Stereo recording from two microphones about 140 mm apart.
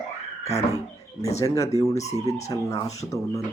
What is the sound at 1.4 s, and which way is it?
Speech, 25° left (ahead or behind).